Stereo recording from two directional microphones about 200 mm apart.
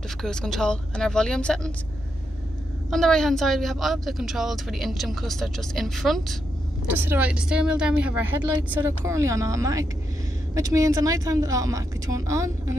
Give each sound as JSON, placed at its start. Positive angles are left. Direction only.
{"t": 0.2, "sound": "a woman's voice", "side_deg": 5}
{"t": 2.9, "sound": "a woman's voice", "side_deg": 0}
{"t": 6.9, "sound": "speech", "side_deg": -10}